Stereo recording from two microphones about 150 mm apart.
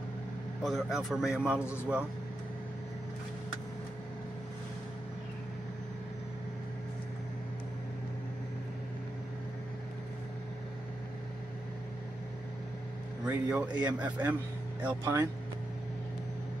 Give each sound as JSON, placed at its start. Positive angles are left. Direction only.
{"t": 0.7, "sound": "a man's voice", "side_deg": 0}
{"t": 13.2, "sound": "a man's voice", "side_deg": -10}